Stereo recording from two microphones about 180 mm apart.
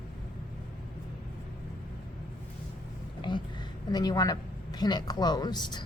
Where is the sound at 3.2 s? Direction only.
25° left (ahead or behind).